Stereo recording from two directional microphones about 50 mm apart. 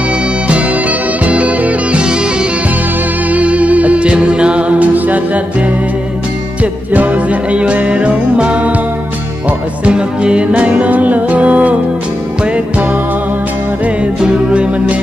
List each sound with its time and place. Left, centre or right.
0.5 s music: right
3.3 s music: right
6.6 s music: right
9.8 s music: right
14.2 s music: centre